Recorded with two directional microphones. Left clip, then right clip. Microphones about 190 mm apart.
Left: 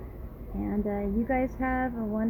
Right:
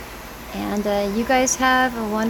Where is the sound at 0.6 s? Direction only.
20° right (ahead or behind).